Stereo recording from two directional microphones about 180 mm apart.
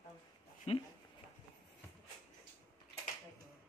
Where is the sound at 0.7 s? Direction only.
35° left (ahead or behind).